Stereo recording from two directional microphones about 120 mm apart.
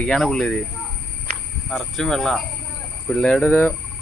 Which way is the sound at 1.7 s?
5° left (ahead or behind).